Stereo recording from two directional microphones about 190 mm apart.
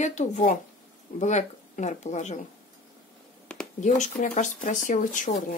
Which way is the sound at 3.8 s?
40° left (ahead or behind).